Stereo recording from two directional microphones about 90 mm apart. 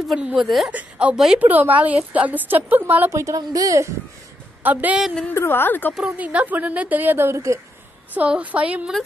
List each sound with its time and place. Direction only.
0.1 s a woman's voice: 5° right (ahead or behind)
1.4 s a woman's voice: 20° right (ahead or behind)
3.1 s a woman's voice: 35° right (ahead or behind)
4.6 s a woman's voice: 15° right (ahead or behind)
5.3 s a woman's voice: 25° left (ahead or behind)
6.1 s a woman's voice: 15° right (ahead or behind); by 7.6 s 35° right (ahead or behind)
8.1 s a woman's voice: 15° right (ahead or behind)